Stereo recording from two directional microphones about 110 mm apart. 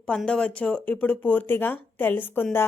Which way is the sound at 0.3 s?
10° left (ahead or behind).